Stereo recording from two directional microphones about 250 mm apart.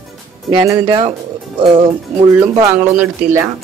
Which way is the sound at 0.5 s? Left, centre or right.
Centre.